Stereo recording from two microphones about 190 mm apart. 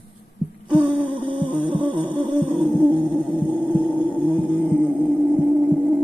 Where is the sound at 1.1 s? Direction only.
25° right (ahead or behind).